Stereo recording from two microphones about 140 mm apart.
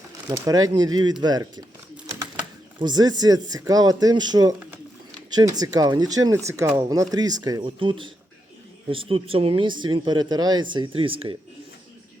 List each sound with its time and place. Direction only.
0.3 s speech: 25° right (ahead or behind)
2.7 s speech: 30° right (ahead or behind)